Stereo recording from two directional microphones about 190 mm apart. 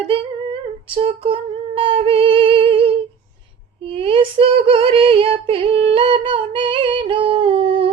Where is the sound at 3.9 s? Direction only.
30° right (ahead or behind).